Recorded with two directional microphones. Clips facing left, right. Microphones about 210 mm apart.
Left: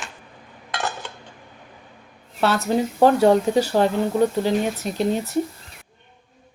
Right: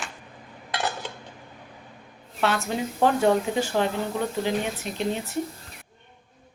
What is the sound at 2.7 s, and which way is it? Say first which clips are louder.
Speech: left 9 dB; 35° left (ahead or behind).